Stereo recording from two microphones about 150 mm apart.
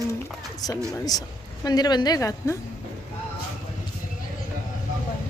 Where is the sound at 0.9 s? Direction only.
25° left (ahead or behind).